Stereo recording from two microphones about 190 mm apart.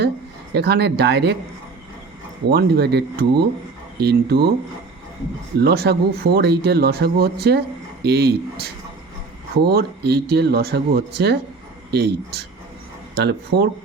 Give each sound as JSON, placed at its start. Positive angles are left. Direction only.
{"t": 0.5, "sound": "speech", "side_deg": -60}
{"t": 2.5, "sound": "speech", "side_deg": -55}
{"t": 5.5, "sound": "speech", "side_deg": -55}